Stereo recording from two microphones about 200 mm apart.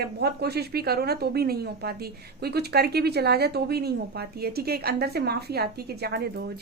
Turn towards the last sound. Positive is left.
turn(degrees=-55)  # may be behind; listen again after turning